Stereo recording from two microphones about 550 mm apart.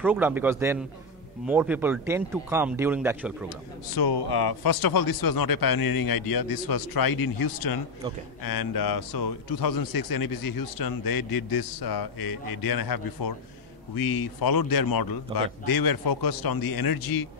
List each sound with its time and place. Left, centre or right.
0.0 s speech: centre
3.9 s a man's voice: left